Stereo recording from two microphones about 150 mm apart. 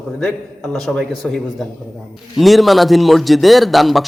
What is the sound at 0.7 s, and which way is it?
A man's voice, centre (ahead or behind).